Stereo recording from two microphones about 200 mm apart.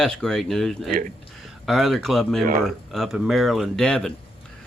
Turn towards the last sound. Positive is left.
turn(degrees=5)  # may be behind; listen again after turning